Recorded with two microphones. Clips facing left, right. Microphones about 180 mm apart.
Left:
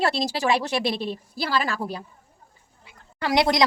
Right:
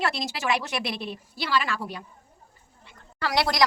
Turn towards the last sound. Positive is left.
turn(degrees=20)  # may be behind; listen again after turning